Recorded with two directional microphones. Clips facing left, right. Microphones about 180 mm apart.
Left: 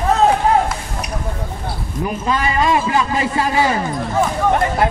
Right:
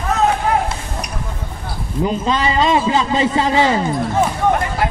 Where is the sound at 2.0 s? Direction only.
25° right (ahead or behind).